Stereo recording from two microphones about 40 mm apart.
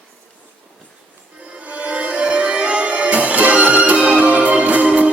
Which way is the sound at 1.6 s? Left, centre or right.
Right.